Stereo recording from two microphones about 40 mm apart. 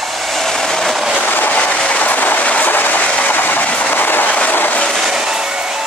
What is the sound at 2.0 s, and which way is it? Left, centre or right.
Train, left.